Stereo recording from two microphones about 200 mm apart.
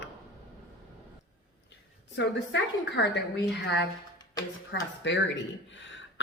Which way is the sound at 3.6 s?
55° left (ahead or behind).